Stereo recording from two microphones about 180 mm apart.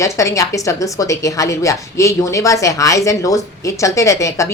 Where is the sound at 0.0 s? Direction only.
15° left (ahead or behind).